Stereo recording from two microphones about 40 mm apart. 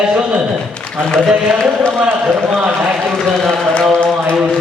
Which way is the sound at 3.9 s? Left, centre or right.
Left.